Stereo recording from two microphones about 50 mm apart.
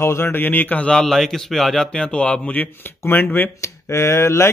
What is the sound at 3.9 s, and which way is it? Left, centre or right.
Speech, left.